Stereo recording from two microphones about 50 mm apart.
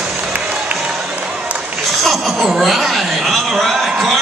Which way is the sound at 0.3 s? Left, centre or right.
Right.